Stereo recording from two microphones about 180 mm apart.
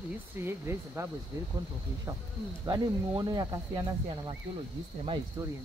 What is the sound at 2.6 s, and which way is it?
Speech, 25° right (ahead or behind).